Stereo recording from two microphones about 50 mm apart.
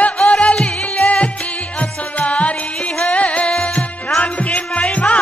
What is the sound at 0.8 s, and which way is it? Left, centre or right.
Music, left.